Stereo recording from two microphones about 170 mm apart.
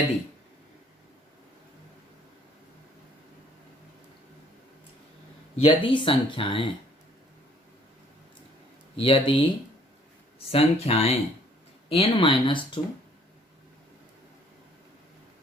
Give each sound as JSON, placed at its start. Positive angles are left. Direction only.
{"t": 5.6, "sound": "speech", "side_deg": 30}
{"t": 9.0, "sound": "speech", "side_deg": 35}
{"t": 10.5, "sound": "speech", "side_deg": 35}